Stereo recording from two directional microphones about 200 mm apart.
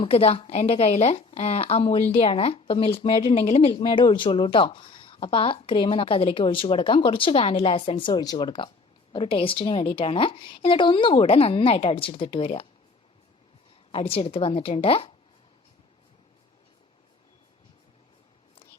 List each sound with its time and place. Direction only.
0.0 s a woman's voice: 30° left (ahead or behind)
13.9 s a woman's voice: 30° left (ahead or behind)